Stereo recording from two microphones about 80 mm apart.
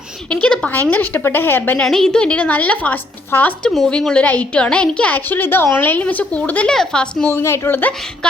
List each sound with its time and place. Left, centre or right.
0.4 s a woman's voice: centre
0.7 s a woman's voice: left
1.8 s a woman's voice: centre; by 3.5 s left
3.8 s a woman's voice: centre
7.3 s a woman's voice: left
8.2 s a woman's voice: centre